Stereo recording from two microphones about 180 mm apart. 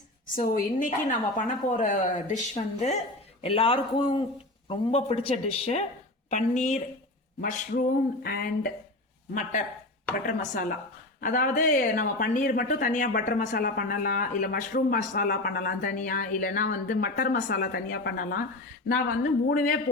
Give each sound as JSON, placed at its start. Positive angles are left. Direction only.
{"t": 0.3, "sound": "speech", "side_deg": 50}